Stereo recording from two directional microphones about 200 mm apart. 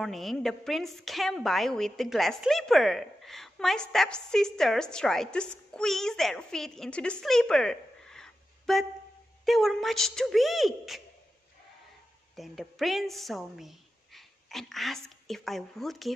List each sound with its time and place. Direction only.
0.0 s a woman's voice: centre (ahead or behind)
12.4 s a woman's voice: centre (ahead or behind)